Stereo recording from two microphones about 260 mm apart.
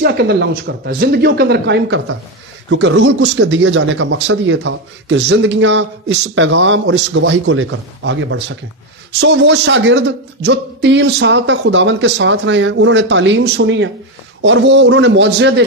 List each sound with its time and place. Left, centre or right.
0.0 s speech: right